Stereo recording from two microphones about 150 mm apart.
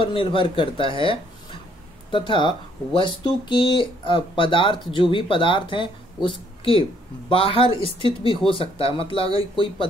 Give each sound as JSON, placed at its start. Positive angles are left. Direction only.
{"t": 0.0, "sound": "a woman's voice", "side_deg": 35}